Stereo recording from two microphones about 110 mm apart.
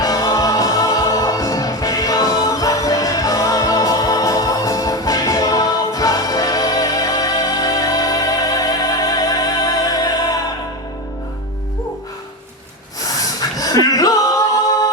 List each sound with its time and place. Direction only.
0.0 s music: 35° left (ahead or behind)
13.1 s a sound: 35° left (ahead or behind)
13.8 s music: 35° left (ahead or behind)